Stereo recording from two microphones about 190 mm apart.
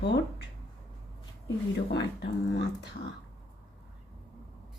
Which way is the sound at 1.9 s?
65° left (ahead or behind).